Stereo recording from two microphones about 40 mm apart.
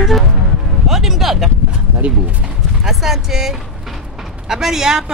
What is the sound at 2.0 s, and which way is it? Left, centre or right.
Speech, right.